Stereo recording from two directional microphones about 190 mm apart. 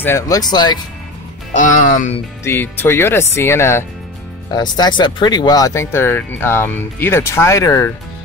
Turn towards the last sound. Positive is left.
turn(degrees=15)  # may be behind; listen again after turning